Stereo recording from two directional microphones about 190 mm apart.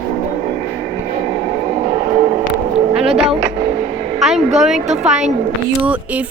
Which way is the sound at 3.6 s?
35° right (ahead or behind).